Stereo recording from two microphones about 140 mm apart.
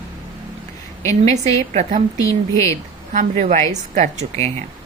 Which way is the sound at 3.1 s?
60° right (ahead or behind).